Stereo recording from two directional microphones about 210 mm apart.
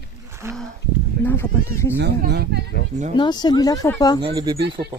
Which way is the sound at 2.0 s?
50° right (ahead or behind).